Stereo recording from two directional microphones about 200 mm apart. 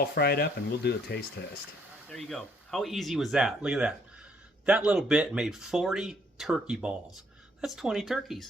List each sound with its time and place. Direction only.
0.0 s speech: 50° left (ahead or behind)
2.0 s speech: centre (ahead or behind)